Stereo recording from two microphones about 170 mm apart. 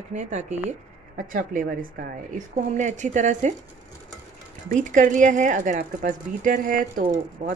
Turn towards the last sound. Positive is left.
turn(degrees=-40)  # may be behind; listen again after turning